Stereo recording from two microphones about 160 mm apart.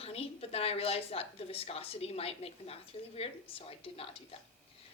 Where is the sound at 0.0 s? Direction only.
40° left (ahead or behind).